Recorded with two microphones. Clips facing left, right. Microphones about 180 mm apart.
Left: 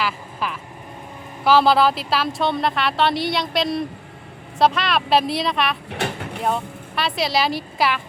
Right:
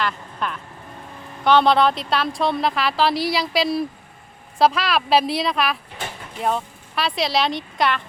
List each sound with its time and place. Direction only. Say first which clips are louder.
0.0 s a sound: even; 5° left (ahead or behind)
1.5 s speech: even; 5° left (ahead or behind)
6.0 s vehicle: left 7 dB; 75° left (ahead or behind)
6.4 s a woman's voice: right 1 dB; centre (ahead or behind)